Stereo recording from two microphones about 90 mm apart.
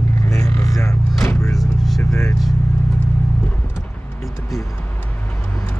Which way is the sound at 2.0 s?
25° left (ahead or behind).